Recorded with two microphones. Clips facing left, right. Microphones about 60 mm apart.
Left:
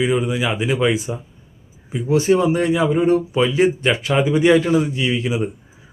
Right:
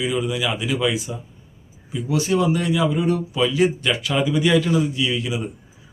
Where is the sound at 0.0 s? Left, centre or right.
Left.